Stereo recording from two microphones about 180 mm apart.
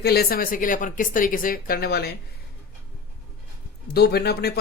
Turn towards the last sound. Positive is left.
turn(degrees=65)  # may be behind; listen again after turning